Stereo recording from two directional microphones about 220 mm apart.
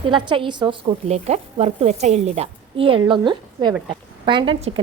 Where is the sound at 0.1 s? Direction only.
20° right (ahead or behind).